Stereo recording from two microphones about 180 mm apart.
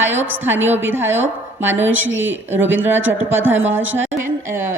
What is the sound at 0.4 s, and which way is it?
A woman's voice, 10° right (ahead or behind).